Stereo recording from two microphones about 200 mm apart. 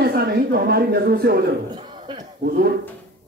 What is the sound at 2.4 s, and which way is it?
Speech, 50° right (ahead or behind).